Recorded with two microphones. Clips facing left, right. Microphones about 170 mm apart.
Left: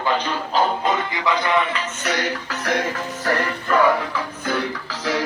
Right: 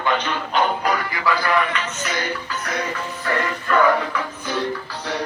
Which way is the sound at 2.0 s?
75° left (ahead or behind).